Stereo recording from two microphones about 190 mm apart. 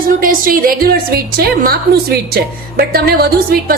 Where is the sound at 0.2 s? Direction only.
50° right (ahead or behind).